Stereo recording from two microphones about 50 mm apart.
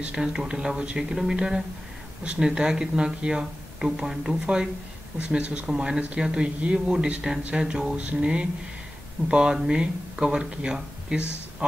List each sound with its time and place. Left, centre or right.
0.0 s speech: centre